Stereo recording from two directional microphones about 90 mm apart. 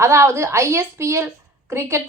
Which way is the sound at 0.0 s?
30° right (ahead or behind).